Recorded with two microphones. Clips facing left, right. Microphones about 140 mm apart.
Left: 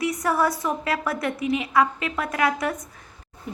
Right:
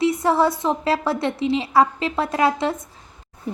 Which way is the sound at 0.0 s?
25° right (ahead or behind).